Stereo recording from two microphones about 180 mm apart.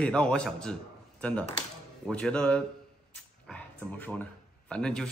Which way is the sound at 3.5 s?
5° left (ahead or behind).